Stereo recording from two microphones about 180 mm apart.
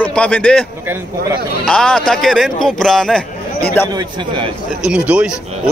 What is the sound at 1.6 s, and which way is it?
Speech, 5° left (ahead or behind).